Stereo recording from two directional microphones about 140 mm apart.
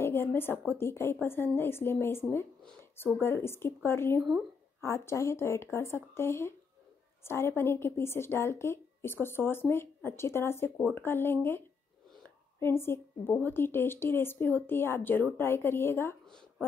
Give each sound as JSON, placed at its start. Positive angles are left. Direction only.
{"t": 0.0, "sound": "a woman's voice", "side_deg": 15}